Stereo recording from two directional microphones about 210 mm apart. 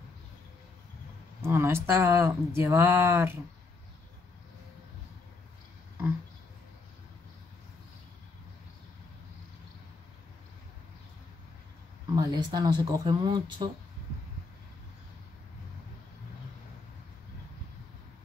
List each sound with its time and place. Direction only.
1.4 s speech: 10° right (ahead or behind)
12.2 s speech: 20° right (ahead or behind)